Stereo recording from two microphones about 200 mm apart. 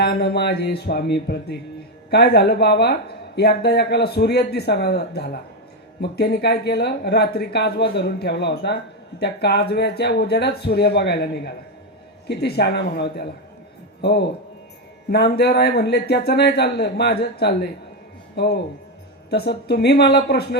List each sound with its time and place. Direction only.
0.0 s a man's voice: 55° left (ahead or behind)